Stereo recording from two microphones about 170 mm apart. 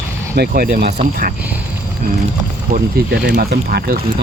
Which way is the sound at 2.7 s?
55° right (ahead or behind).